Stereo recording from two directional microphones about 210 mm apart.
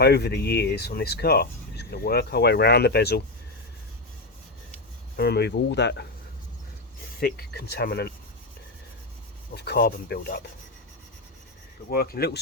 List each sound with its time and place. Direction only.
0.0 s speech: 50° left (ahead or behind)
5.1 s speech: 50° left (ahead or behind)
7.2 s speech: 50° left (ahead or behind)
9.6 s speech: 50° left (ahead or behind)
11.9 s speech: 45° left (ahead or behind)